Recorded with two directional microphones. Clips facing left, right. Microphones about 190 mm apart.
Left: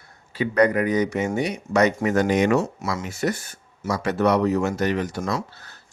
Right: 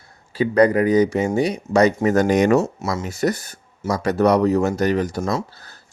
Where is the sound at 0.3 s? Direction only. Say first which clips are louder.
Right 4 dB; 35° right (ahead or behind).